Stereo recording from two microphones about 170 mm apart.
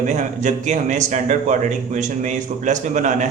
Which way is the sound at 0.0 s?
45° right (ahead or behind).